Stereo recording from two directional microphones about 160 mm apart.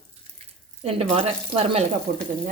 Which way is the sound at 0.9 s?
40° right (ahead or behind).